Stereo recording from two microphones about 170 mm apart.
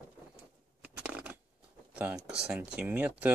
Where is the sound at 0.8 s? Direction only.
10° right (ahead or behind).